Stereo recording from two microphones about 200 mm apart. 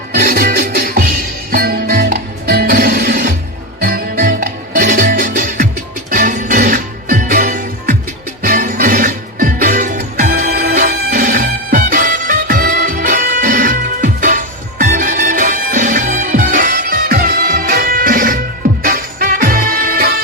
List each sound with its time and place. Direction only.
0.1 s music: 45° right (ahead or behind)